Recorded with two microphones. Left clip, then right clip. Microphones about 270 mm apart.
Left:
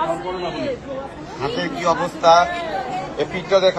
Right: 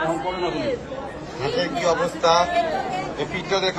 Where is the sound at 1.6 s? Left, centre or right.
Centre.